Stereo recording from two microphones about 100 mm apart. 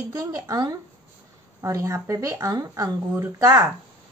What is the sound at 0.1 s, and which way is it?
A woman's voice, 35° right (ahead or behind).